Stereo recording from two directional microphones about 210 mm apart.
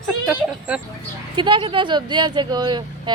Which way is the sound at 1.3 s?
20° right (ahead or behind).